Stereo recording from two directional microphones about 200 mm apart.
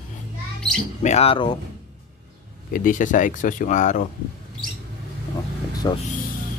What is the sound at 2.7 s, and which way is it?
Speech, 40° left (ahead or behind).